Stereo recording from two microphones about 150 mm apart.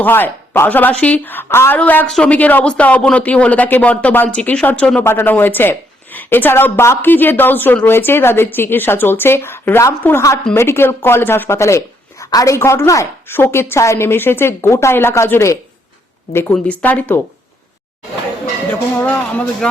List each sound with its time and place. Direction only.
0.0 s speech: 15° left (ahead or behind)
18.7 s speech: 15° left (ahead or behind)